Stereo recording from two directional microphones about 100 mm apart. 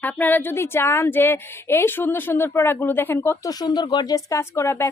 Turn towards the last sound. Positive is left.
turn(degrees=25)  # may be behind; listen again after turning